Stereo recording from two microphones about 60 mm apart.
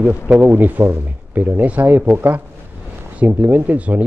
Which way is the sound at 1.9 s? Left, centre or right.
Right.